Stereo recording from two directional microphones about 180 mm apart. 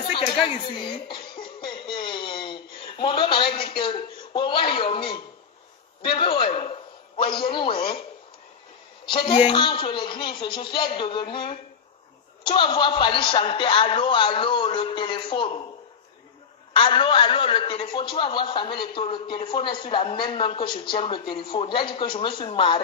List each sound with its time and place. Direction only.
0.1 s a man's voice: 30° left (ahead or behind)
1.9 s a sound: 25° left (ahead or behind)
3.0 s a man's voice: 25° left (ahead or behind)
9.1 s a man's voice: 25° left (ahead or behind)
12.4 s a man's voice: 30° left (ahead or behind)
16.7 s a man's voice: 25° left (ahead or behind)